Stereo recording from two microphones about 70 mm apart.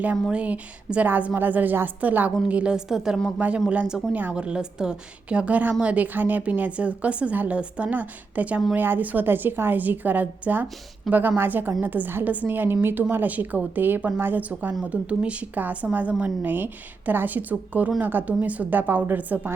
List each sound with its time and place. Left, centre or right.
0.0 s a woman's voice: centre
4.4 s a woman's voice: centre